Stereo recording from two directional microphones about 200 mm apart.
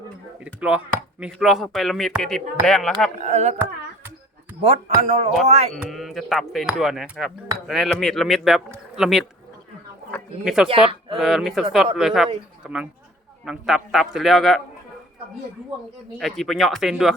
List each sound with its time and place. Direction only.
0.3 s speech: 5° right (ahead or behind)
3.2 s speech: 35° right (ahead or behind)
4.6 s speech: 35° right (ahead or behind)
5.7 s speech: centre (ahead or behind)
10.4 s speech: centre (ahead or behind)
16.1 s speech: centre (ahead or behind)